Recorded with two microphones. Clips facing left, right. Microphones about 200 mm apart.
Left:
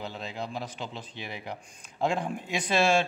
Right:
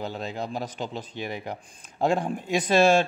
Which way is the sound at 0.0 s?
45° right (ahead or behind).